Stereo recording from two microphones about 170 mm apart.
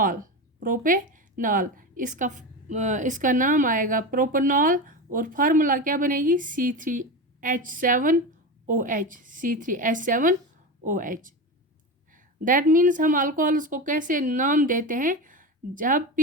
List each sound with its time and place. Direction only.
0.0 s speech: 55° right (ahead or behind)